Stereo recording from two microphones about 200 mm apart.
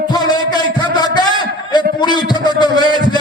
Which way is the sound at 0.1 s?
20° left (ahead or behind).